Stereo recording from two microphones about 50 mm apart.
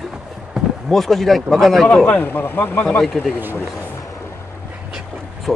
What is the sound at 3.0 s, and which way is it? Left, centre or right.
Speech, centre.